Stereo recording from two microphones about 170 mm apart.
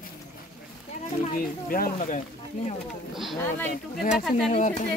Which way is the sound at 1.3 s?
55° left (ahead or behind).